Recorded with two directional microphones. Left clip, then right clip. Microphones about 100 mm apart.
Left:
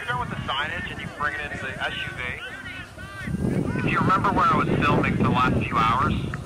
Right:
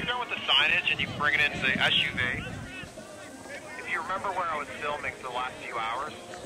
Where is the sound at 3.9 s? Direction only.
20° left (ahead or behind).